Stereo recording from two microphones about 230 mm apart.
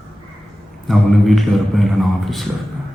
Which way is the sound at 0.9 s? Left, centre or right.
Centre.